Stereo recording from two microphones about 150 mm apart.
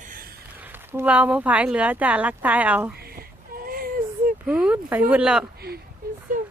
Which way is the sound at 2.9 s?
90° right.